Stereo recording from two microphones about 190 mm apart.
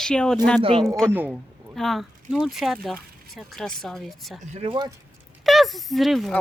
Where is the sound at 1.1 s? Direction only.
10° right (ahead or behind).